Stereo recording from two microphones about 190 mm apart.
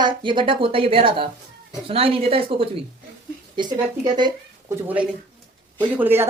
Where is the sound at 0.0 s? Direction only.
25° right (ahead or behind).